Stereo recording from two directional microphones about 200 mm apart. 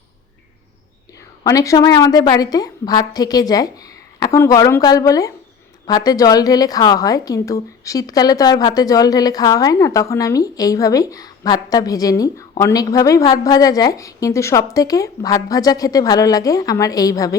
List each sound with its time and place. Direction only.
1.5 s a woman's voice: 15° left (ahead or behind)